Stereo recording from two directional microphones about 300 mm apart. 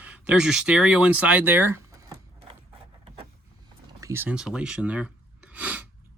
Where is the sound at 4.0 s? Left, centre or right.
Centre.